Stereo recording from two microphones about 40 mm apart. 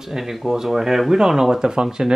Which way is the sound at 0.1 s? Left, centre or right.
Centre.